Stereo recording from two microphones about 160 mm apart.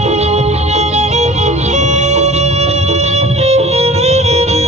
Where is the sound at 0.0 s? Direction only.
45° right (ahead or behind).